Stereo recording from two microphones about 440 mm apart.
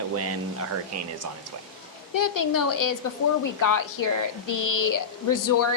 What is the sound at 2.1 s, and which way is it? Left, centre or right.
Speech, left.